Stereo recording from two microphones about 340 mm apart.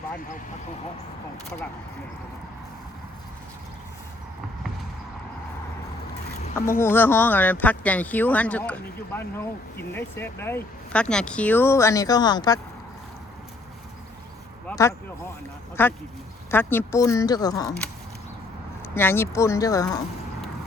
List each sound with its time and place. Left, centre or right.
6.7 s speech: centre
14.7 s a sound: centre
15.7 s speech: centre
18.9 s speech: centre